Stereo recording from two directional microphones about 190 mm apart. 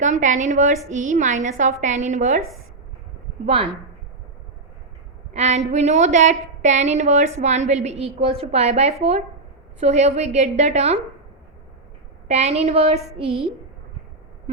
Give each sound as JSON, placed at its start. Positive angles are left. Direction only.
{"t": 0.0, "sound": "a woman's voice", "side_deg": -40}
{"t": 3.4, "sound": "a woman's voice", "side_deg": -30}
{"t": 5.3, "sound": "a woman's voice", "side_deg": -35}
{"t": 12.3, "sound": "a woman's voice", "side_deg": -35}